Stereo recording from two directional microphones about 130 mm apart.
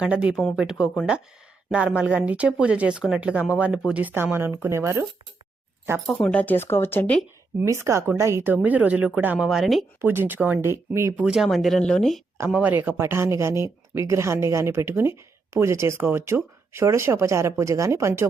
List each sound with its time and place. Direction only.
0.0 s a woman's voice: 10° right (ahead or behind)
6.1 s speech: 10° left (ahead or behind)
7.6 s a woman's voice: 20° right (ahead or behind); by 9.8 s centre (ahead or behind)
10.0 s a woman's voice: 15° right (ahead or behind)
11.2 s speech: 5° right (ahead or behind)
12.5 s speech: 10° right (ahead or behind)